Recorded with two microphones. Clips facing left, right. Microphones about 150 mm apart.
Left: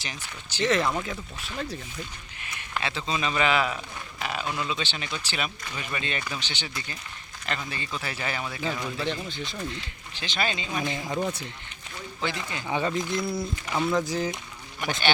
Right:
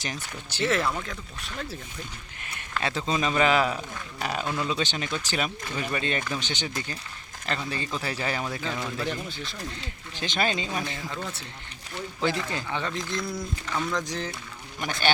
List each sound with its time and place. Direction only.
0.0 s speech: 50° right (ahead or behind)
0.6 s speech: 5° right (ahead or behind)
0.9 s speech: 15° left (ahead or behind)
2.8 s speech: 45° right (ahead or behind)
8.8 s speech: 5° right (ahead or behind)
10.2 s speech: 45° right (ahead or behind)
10.8 s speech: 15° left (ahead or behind)
12.2 s speech: 35° right (ahead or behind)
12.6 s speech: 10° left (ahead or behind)